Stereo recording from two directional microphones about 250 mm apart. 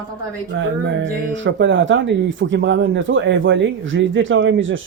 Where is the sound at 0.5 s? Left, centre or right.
Right.